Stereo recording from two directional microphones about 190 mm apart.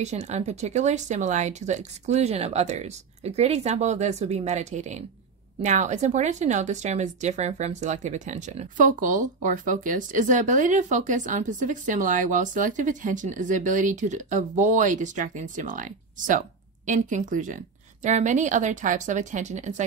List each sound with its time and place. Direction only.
0.0 s speech: 35° right (ahead or behind)